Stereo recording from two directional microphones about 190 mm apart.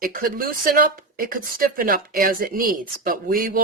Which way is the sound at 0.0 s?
50° right (ahead or behind).